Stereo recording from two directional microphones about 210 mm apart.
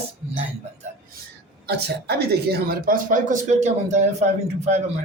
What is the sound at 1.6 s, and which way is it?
Speech, 50° right (ahead or behind).